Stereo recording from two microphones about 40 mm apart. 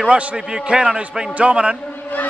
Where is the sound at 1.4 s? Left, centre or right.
Right.